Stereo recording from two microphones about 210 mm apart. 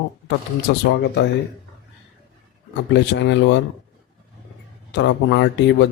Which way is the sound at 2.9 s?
60° left (ahead or behind).